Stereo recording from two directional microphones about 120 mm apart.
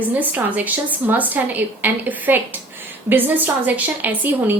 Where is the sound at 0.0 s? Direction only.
15° right (ahead or behind).